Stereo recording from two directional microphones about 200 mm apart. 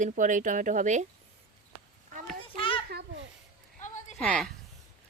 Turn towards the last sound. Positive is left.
turn(degrees=5)  # may be behind; listen again after turning